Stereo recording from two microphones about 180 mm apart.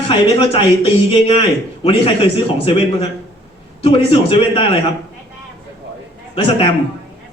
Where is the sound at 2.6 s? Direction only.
30° left (ahead or behind).